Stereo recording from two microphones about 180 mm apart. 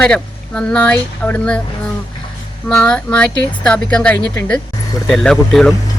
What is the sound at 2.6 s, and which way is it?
Speech, 5° left (ahead or behind).